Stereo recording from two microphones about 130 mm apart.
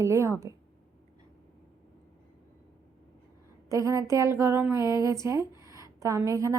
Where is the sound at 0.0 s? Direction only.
20° right (ahead or behind).